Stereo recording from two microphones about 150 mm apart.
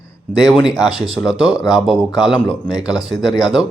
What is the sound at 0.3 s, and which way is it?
Speech, 25° left (ahead or behind).